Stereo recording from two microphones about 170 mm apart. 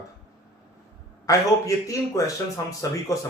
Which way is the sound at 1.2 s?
20° left (ahead or behind).